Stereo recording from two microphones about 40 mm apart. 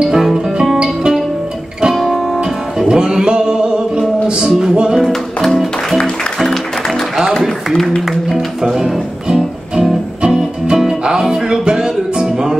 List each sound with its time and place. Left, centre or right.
0.0 s guitar: centre
2.0 s music: centre
4.9 s music: centre
7.3 s a sound: centre
8.1 s music: centre
10.2 s music: centre